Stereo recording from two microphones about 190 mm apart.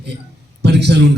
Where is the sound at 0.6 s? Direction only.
60° right (ahead or behind).